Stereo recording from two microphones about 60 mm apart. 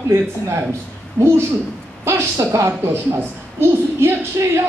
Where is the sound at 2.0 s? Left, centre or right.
Right.